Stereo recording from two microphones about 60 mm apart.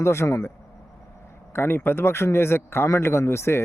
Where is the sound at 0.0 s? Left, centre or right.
Left.